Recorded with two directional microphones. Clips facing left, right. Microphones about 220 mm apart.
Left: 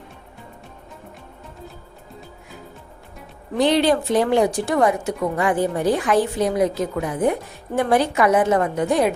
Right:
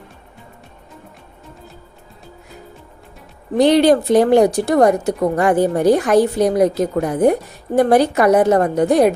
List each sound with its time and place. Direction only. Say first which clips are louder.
3.6 s a woman's voice: right 6 dB; 40° right (ahead or behind)